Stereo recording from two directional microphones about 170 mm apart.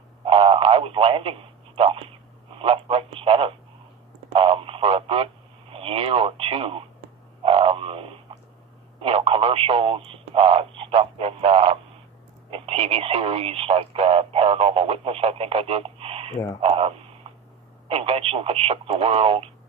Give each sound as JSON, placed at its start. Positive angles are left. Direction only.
{"t": 0.3, "sound": "telephone", "side_deg": -35}
{"t": 2.6, "sound": "speech", "side_deg": -35}
{"t": 4.3, "sound": "radio", "side_deg": -30}
{"t": 5.7, "sound": "speech", "side_deg": -35}
{"t": 7.4, "sound": "frog", "side_deg": -35}
{"t": 9.0, "sound": "speech", "side_deg": -35}